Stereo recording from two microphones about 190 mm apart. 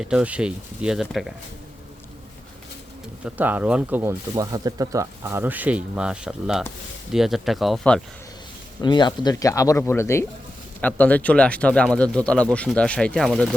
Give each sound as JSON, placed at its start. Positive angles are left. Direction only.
{"t": 0.0, "sound": "speech", "side_deg": -5}
{"t": 3.2, "sound": "speech", "side_deg": -10}
{"t": 8.8, "sound": "speech", "side_deg": 25}